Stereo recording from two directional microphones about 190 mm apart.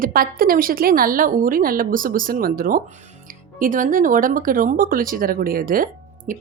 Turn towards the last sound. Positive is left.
turn(degrees=-50)  # may be behind; listen again after turning